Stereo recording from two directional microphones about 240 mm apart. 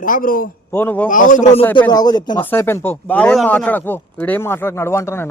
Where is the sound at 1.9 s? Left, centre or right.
Centre.